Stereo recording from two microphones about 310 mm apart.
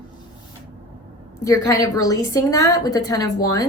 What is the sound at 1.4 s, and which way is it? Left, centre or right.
A woman's voice, centre.